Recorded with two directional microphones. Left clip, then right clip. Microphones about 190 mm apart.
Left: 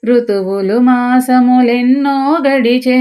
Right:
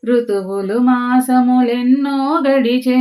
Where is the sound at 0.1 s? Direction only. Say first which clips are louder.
Left 4 dB; 35° left (ahead or behind).